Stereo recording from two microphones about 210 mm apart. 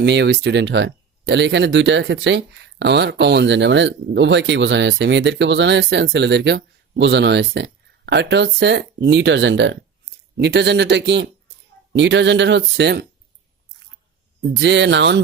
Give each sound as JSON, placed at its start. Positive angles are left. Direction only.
{"t": 0.0, "sound": "speech", "side_deg": -55}
{"t": 14.5, "sound": "speech", "side_deg": -55}